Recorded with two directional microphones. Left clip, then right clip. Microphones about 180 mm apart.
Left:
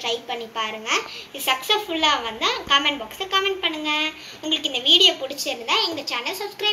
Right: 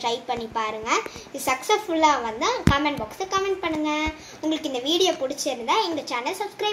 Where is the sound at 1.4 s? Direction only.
70° right (ahead or behind).